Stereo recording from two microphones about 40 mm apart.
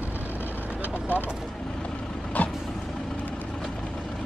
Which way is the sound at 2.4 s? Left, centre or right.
Left.